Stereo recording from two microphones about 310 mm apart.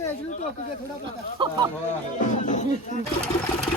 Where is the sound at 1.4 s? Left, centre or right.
Centre.